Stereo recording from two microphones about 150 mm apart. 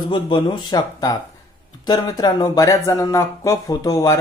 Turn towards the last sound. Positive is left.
turn(degrees=20)  # may be behind; listen again after turning